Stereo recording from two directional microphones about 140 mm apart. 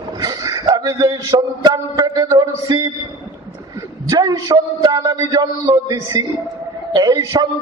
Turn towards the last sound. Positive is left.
turn(degrees=-30)  # may be behind; listen again after turning